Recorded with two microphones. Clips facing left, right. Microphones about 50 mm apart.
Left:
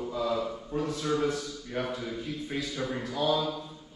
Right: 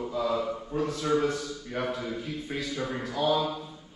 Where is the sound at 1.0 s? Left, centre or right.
Centre.